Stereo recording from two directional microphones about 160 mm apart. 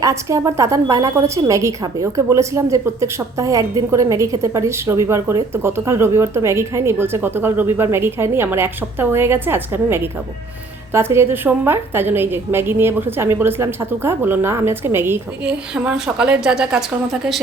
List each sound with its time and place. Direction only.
0.0 s a woman's voice: 20° right (ahead or behind)